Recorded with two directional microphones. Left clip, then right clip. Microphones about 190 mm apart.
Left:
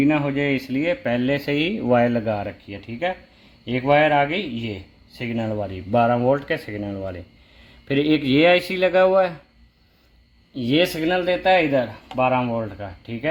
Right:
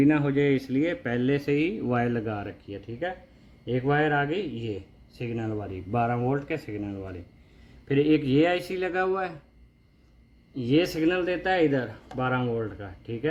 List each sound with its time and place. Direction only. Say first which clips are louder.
0.0 s speech: left 2 dB; 25° left (ahead or behind); by 9.3 s 45° left (ahead or behind)
10.6 s speech: left 4 dB; 50° left (ahead or behind)